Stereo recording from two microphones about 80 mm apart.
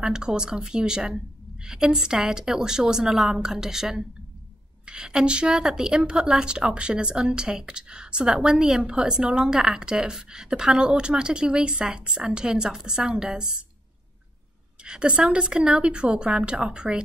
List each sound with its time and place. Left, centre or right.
0.0 s a woman's voice: centre
14.8 s a woman's voice: centre